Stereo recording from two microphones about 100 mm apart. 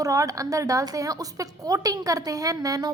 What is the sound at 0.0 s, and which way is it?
A woman's voice, 35° right (ahead or behind).